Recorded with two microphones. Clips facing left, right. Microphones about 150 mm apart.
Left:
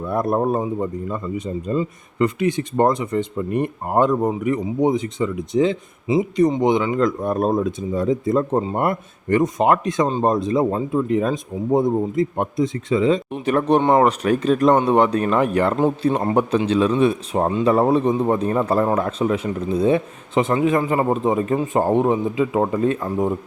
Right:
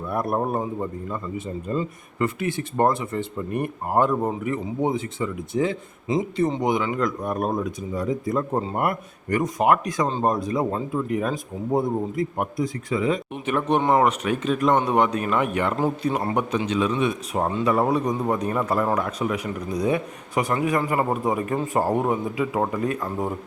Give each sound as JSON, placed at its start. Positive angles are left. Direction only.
{"t": 0.1, "sound": "a man's voice", "side_deg": 20}
{"t": 13.4, "sound": "a man's voice", "side_deg": 35}